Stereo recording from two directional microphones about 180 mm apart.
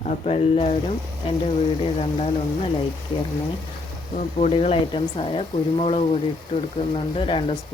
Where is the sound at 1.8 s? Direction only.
30° left (ahead or behind).